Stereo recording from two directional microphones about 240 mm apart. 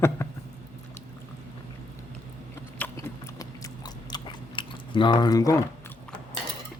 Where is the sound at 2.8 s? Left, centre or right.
Centre.